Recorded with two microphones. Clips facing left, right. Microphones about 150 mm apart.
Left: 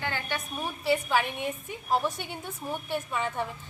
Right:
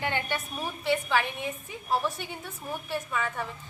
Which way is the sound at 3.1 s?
25° left (ahead or behind).